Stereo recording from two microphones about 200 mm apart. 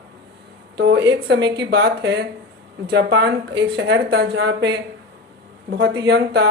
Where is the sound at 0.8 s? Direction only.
60° right (ahead or behind).